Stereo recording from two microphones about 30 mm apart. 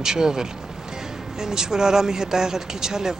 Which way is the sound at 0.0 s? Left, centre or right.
Centre.